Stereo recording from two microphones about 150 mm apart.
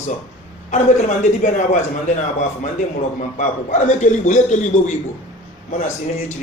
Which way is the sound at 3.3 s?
55° left (ahead or behind).